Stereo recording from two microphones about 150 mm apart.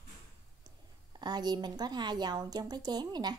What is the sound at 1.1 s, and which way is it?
Speech, 30° right (ahead or behind).